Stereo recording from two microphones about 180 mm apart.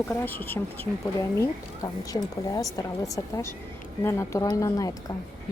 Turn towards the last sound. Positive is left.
turn(degrees=20)  # may be behind; listen again after turning